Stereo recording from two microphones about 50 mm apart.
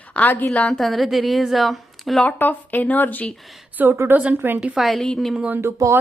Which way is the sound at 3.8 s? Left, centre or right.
Right.